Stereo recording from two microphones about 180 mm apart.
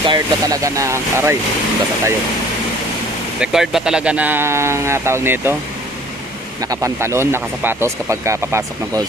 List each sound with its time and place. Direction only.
0.0 s speech: 20° right (ahead or behind)
3.3 s speech: 5° right (ahead or behind)
6.6 s speech: 20° right (ahead or behind)